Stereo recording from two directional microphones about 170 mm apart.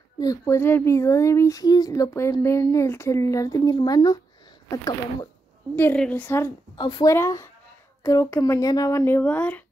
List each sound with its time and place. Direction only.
0.2 s speech: 20° left (ahead or behind)
5.8 s speech: 10° left (ahead or behind)
6.8 s speech: 25° left (ahead or behind); by 9.6 s 10° left (ahead or behind)